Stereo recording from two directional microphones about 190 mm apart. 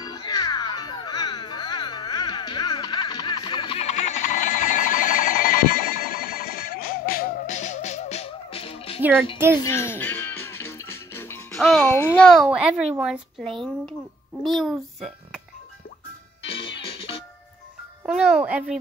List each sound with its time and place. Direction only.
0.0 s music: 25° left (ahead or behind)
9.6 s music: 15° left (ahead or behind)
11.5 s music: centre (ahead or behind)
11.8 s a child's voice: 10° left (ahead or behind)
16.4 s music: 30° left (ahead or behind)
18.0 s speech: 5° right (ahead or behind)